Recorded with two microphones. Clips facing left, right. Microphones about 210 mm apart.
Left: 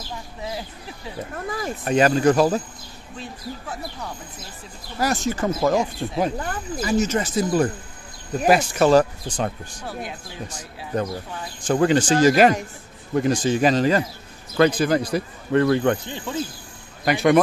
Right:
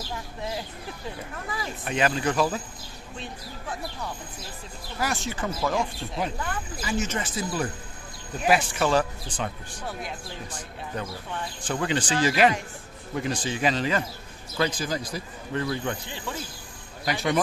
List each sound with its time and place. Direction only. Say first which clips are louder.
1.3 s speech: left 6 dB; 45° left (ahead or behind)
5.0 s speech: left 7 dB; 45° left (ahead or behind)
11.6 s speech: left 10 dB; 45° left (ahead or behind)
14.6 s speech: left 9 dB; 60° left (ahead or behind)
17.0 s speech: left 9 dB; 60° left (ahead or behind)